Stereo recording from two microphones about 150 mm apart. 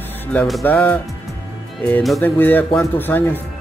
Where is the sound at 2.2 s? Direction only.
15° left (ahead or behind).